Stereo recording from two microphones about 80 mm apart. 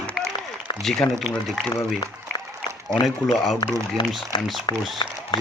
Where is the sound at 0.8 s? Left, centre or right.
Centre.